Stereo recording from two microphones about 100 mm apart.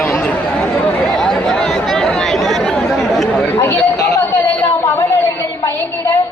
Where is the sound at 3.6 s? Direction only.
25° left (ahead or behind).